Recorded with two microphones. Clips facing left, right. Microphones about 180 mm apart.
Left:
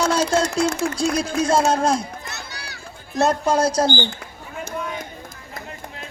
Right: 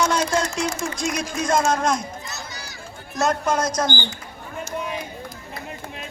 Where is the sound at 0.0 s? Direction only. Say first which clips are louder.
Left 1 dB; 30° left (ahead or behind).